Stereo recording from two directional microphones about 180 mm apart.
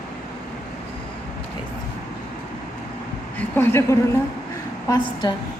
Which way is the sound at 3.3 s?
10° left (ahead or behind).